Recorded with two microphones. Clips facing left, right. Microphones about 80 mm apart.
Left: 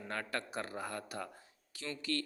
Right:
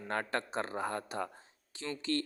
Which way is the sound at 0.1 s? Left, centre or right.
Right.